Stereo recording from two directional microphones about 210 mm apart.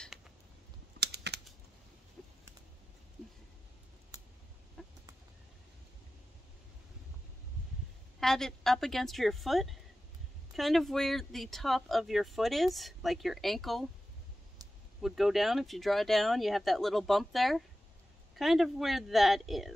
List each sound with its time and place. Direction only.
0.9 s typing: 50° right (ahead or behind)
2.2 s a sound: 5° left (ahead or behind)
4.8 s chicken: centre (ahead or behind)
8.2 s speech: centre (ahead or behind)
15.0 s speech: centre (ahead or behind)